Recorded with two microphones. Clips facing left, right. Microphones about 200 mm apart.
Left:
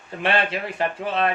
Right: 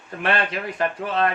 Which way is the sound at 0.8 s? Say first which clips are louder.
Right 1 dB; 25° left (ahead or behind).